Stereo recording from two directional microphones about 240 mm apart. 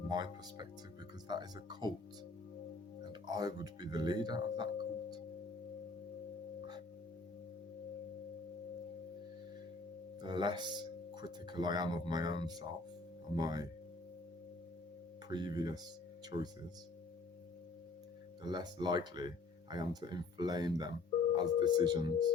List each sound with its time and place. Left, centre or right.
0.1 s speech: centre
3.1 s speech: centre
10.2 s speech: centre
15.3 s speech: centre
18.4 s speech: centre